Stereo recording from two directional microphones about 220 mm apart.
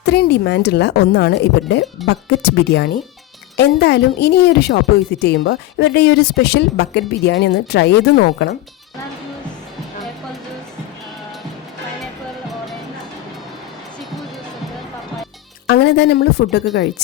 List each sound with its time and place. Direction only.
0.0 s speech: 50° left (ahead or behind)
15.6 s speech: 50° left (ahead or behind)